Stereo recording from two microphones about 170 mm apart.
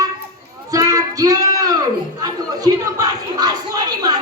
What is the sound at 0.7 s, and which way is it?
Child singing, 20° right (ahead or behind).